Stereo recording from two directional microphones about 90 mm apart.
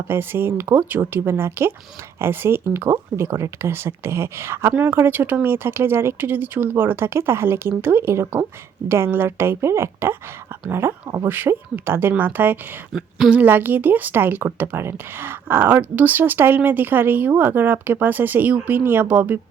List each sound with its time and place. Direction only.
0.1 s speech: 25° right (ahead or behind)
12.9 s a woman's voice: 5° right (ahead or behind)
13.3 s speech: 20° right (ahead or behind)